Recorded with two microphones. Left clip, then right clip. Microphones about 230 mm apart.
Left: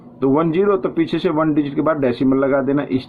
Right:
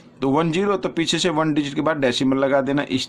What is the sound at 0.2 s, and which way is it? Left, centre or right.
Speech, right.